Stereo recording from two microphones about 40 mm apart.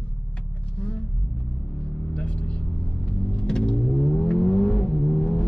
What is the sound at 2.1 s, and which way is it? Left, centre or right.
Vehicle, left.